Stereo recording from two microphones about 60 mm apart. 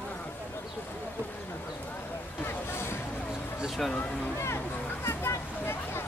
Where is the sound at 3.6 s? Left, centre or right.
Centre.